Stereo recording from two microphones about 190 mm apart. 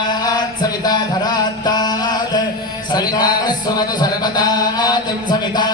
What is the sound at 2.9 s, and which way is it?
Speech, 20° left (ahead or behind).